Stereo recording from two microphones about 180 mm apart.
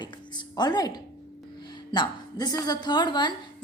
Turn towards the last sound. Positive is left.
turn(degrees=25)  # may be behind; listen again after turning